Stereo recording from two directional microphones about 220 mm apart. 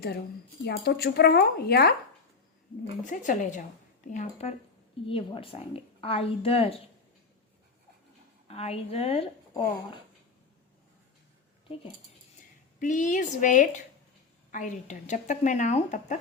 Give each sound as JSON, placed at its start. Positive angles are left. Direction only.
{"t": 0.6, "sound": "speech", "side_deg": 45}
{"t": 3.0, "sound": "a woman's voice", "side_deg": 35}
{"t": 8.4, "sound": "a woman's voice", "side_deg": 25}
{"t": 12.8, "sound": "speech", "side_deg": 35}